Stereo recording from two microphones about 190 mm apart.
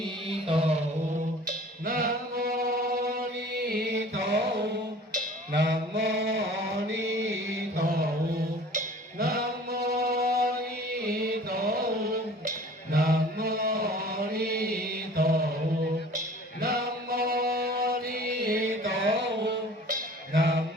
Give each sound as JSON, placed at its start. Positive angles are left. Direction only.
{"t": 0.4, "sound": "a sound", "side_deg": -30}
{"t": 1.5, "sound": "music", "side_deg": -50}
{"t": 5.1, "sound": "cowbell", "side_deg": -60}
{"t": 6.9, "sound": "mantra", "side_deg": -90}
{"t": 7.8, "sound": "music", "side_deg": -55}
{"t": 12.5, "sound": "mantra", "side_deg": -55}
{"t": 16.1, "sound": "music", "side_deg": -55}